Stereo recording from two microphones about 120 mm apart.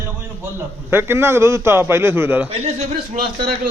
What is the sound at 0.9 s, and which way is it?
A man's voice, 20° right (ahead or behind).